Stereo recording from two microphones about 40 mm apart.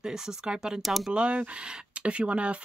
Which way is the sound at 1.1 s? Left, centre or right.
Right.